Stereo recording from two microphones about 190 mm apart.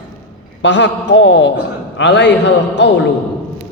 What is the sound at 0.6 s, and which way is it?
A man's voice, 70° left (ahead or behind).